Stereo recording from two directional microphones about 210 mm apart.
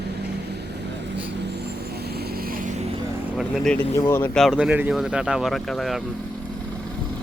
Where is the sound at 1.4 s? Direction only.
55° right (ahead or behind).